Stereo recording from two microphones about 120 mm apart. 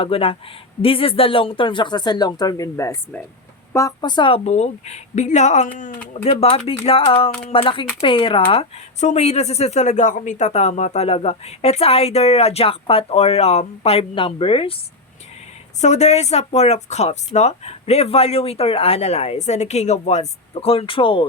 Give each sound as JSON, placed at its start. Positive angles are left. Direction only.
{"t": 0.0, "sound": "speech", "side_deg": 50}
{"t": 4.0, "sound": "speech", "side_deg": 40}
{"t": 4.4, "sound": "speech", "side_deg": 65}
{"t": 6.2, "sound": "speech", "side_deg": 55}
{"t": 9.0, "sound": "speech", "side_deg": 70}
{"t": 14.2, "sound": "speech", "side_deg": 50}
{"t": 15.8, "sound": "speech", "side_deg": 70}